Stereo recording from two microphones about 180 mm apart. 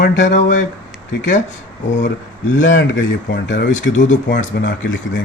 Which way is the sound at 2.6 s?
90° left.